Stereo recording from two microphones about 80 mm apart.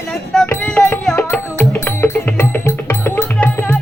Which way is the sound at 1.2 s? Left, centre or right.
Left.